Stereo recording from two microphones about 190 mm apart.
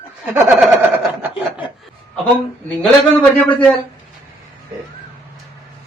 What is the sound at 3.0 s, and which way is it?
Speech, 10° left (ahead or behind).